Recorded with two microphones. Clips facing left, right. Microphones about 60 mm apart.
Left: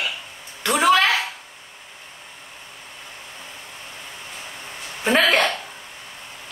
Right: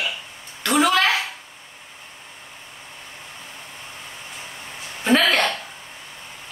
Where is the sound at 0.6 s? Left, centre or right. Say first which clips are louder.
Left 1 dB; centre.